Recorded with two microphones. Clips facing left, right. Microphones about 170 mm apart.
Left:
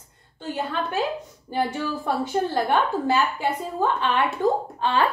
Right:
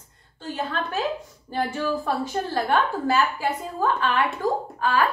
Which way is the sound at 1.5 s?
15° left (ahead or behind).